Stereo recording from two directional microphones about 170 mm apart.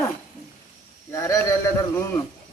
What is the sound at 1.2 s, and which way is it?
Speech, 20° left (ahead or behind).